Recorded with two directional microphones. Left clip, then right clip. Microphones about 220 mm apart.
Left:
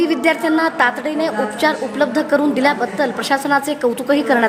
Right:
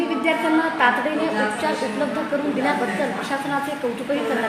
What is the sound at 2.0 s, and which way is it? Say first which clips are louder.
Speech: left 10 dB; 45° left (ahead or behind).